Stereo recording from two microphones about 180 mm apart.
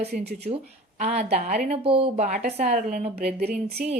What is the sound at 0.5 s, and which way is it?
Speech, 40° right (ahead or behind).